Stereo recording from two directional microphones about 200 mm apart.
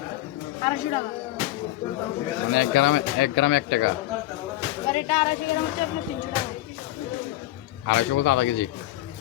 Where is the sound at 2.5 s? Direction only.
65° left (ahead or behind).